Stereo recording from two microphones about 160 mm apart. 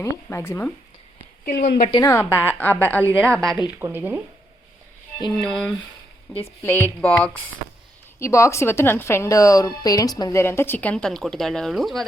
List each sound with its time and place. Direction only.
0.0 s a woman's voice: 15° left (ahead or behind)
1.5 s a woman's voice: 80° left
1.9 s a woman's voice: 20° left (ahead or behind); by 3.6 s centre (ahead or behind)
3.8 s speech: 15° right (ahead or behind)
5.4 s speech: 5° left (ahead or behind)
6.3 s a woman's voice: 15° left (ahead or behind)
8.2 s a woman's voice: 20° left (ahead or behind); by 12.0 s centre (ahead or behind)